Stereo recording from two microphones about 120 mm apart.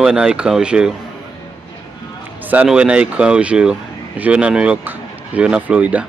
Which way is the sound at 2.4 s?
15° right (ahead or behind).